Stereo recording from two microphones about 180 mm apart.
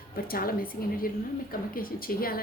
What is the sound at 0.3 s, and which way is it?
A woman's voice, 55° left (ahead or behind).